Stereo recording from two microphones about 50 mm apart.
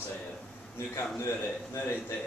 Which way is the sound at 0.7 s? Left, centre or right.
Left.